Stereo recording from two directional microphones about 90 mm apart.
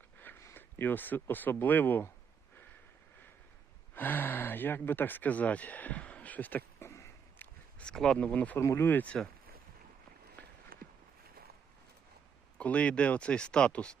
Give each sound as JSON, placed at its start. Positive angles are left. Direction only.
{"t": 0.2, "sound": "speech", "side_deg": 25}
{"t": 3.9, "sound": "a sound", "side_deg": 20}
{"t": 7.8, "sound": "speech", "side_deg": 10}
{"t": 8.5, "sound": "speech", "side_deg": 30}
{"t": 12.5, "sound": "speech", "side_deg": 15}